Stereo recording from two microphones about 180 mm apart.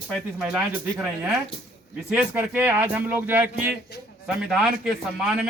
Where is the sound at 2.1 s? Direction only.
10° right (ahead or behind).